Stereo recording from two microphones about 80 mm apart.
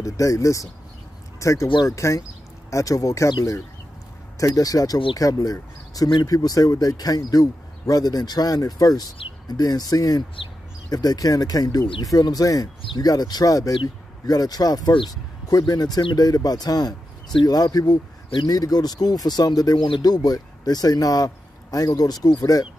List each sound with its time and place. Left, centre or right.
0.0 s speech: left
4.4 s speech: left
5.4 s a sound: left
6.2 s speech: left